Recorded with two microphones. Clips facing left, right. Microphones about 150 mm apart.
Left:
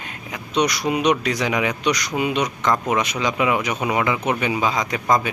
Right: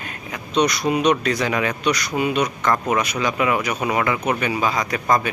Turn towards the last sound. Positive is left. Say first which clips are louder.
# even
turn(degrees=20)  # may be behind; listen again after turning